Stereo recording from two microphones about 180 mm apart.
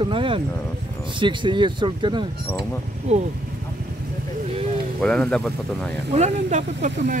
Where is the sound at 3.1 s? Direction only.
40° right (ahead or behind).